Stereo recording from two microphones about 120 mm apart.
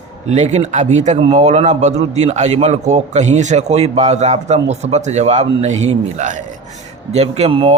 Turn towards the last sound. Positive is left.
turn(degrees=-55)  # may be behind; listen again after turning